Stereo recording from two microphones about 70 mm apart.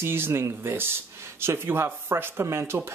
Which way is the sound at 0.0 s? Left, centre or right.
Right.